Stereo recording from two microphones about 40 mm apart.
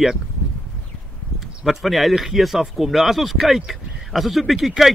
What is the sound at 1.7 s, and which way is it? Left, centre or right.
Speech, centre.